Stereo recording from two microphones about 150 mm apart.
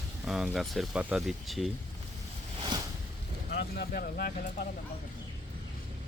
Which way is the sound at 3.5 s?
90° left.